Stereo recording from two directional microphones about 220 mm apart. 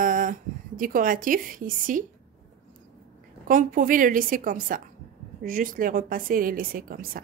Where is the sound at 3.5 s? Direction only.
35° right (ahead or behind).